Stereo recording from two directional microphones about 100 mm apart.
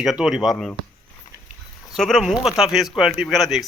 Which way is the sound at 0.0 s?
Centre (ahead or behind).